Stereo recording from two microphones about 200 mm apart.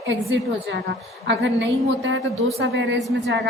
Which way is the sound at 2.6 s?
70° right (ahead or behind).